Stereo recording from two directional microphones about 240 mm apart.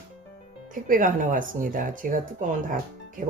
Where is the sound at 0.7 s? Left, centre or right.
Right.